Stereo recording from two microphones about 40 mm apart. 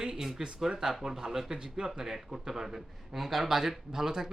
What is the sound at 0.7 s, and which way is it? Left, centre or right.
A man's voice, centre.